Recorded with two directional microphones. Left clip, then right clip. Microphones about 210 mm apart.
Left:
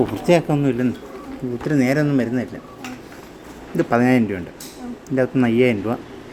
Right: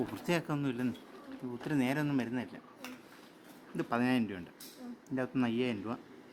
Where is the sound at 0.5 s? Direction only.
30° right (ahead or behind).